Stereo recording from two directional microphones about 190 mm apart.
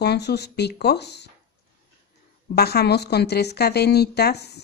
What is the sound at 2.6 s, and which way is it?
Speech, 60° left (ahead or behind).